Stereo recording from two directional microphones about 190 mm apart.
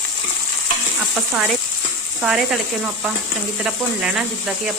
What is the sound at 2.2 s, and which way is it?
Speech, centre (ahead or behind).